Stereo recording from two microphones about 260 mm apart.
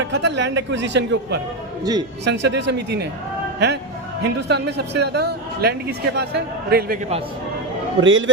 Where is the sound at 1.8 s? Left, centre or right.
Centre.